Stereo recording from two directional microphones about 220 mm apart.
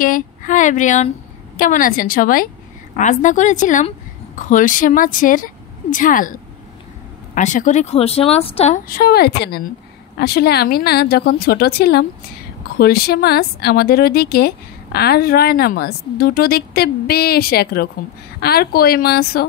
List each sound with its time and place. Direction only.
0.0 s speech: 40° left (ahead or behind)